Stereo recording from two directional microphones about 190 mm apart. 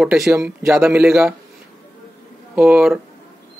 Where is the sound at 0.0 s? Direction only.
Centre (ahead or behind).